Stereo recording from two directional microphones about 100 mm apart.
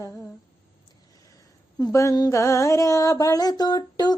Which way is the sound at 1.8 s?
30° left (ahead or behind).